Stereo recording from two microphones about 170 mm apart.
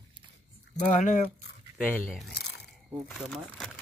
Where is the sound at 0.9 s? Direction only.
50° left (ahead or behind).